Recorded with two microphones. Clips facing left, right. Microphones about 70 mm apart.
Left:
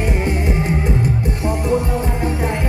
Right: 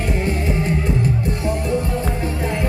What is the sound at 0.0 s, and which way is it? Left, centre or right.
Music, centre.